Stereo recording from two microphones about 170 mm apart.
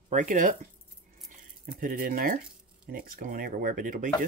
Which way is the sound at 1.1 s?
55° right (ahead or behind).